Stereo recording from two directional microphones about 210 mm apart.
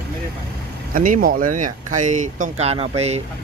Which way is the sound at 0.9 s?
40° right (ahead or behind).